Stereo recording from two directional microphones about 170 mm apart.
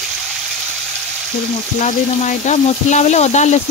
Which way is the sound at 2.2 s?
45° left (ahead or behind).